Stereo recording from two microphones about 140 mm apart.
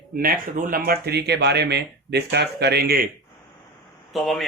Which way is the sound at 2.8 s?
90° right.